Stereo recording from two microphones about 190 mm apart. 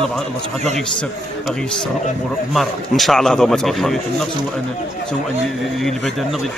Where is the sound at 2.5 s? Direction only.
Centre (ahead or behind).